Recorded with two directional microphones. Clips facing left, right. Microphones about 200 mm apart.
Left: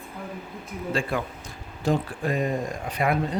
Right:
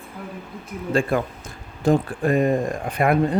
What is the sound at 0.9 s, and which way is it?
Speech, 50° right (ahead or behind).